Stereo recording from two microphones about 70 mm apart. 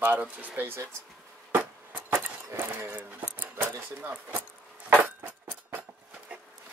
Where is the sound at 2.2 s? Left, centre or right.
Right.